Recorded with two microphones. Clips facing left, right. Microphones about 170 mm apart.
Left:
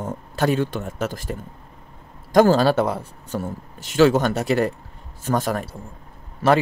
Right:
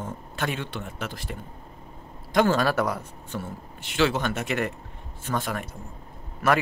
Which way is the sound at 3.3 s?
40° left (ahead or behind).